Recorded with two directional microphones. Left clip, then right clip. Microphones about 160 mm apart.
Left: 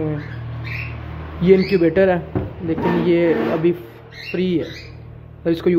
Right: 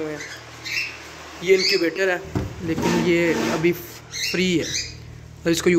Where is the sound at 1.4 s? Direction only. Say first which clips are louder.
Left 3 dB; 10° left (ahead or behind).